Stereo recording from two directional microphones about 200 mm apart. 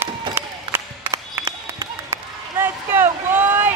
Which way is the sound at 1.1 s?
15° right (ahead or behind).